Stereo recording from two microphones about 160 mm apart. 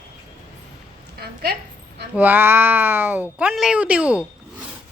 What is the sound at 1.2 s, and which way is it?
Speech, 75° right (ahead or behind).